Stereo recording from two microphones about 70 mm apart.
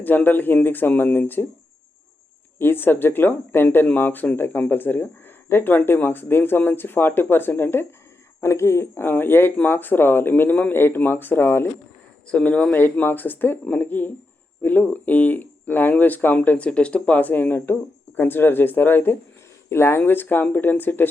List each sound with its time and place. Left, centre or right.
0.0 s speech: left
2.6 s speech: left
12.3 s speech: centre